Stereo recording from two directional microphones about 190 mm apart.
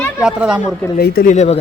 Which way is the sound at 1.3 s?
35° left (ahead or behind).